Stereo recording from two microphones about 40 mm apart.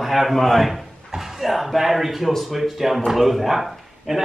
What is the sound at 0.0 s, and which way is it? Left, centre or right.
Speech, centre.